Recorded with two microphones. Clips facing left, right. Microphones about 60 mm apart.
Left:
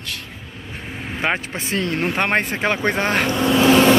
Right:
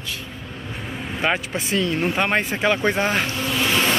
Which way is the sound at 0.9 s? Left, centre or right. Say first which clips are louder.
Even; left.